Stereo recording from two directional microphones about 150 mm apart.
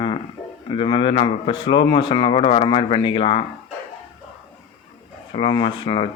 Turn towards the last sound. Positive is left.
turn(degrees=35)  # may be behind; listen again after turning